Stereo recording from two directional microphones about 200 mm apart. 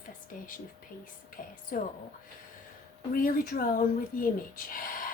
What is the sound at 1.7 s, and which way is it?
Speech, 45° left (ahead or behind).